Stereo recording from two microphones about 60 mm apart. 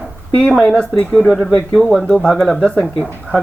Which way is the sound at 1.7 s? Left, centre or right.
Centre.